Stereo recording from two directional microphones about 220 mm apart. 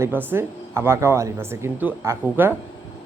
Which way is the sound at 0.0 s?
10° right (ahead or behind).